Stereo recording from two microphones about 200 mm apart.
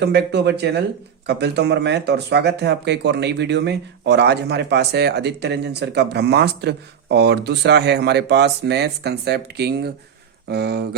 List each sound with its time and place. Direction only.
0.0 s speech: 55° right (ahead or behind)